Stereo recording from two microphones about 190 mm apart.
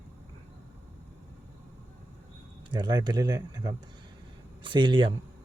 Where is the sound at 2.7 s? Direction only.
25° right (ahead or behind).